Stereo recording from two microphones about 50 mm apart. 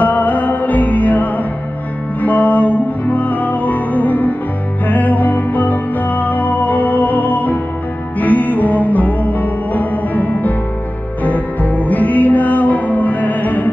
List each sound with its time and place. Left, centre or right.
0.0 s music: left